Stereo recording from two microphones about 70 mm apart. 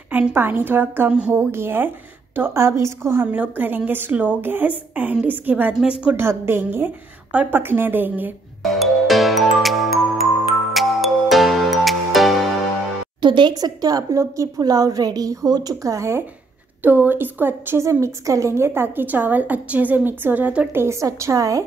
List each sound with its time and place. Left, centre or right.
0.3 s a woman's voice: right
3.3 s a woman's voice: right
5.8 s a woman's voice: centre
6.1 s a woman's voice: right
8.7 s music: centre
13.2 s a woman's voice: right
14.6 s a woman's voice: right
16.8 s a woman's voice: right
17.8 s a woman's voice: right
20.8 s a woman's voice: right